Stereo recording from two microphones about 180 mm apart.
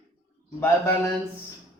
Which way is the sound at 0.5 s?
15° left (ahead or behind).